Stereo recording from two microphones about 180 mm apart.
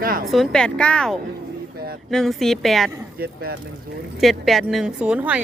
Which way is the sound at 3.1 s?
55° right (ahead or behind).